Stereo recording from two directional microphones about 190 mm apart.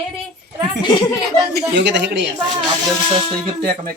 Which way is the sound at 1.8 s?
65° right (ahead or behind).